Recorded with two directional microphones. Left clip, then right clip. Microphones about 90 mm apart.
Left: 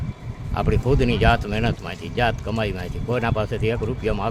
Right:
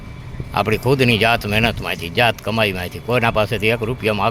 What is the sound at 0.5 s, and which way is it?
Speech, 15° right (ahead or behind).